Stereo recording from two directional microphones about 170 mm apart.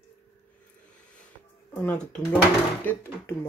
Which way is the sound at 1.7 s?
10° left (ahead or behind).